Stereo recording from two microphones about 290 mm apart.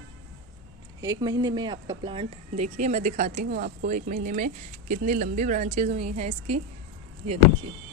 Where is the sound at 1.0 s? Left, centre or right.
Centre.